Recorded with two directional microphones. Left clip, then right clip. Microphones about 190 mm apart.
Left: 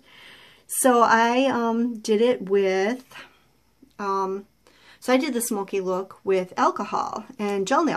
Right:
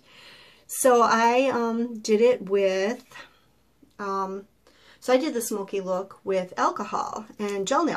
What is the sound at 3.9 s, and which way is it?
Speech, 55° left (ahead or behind).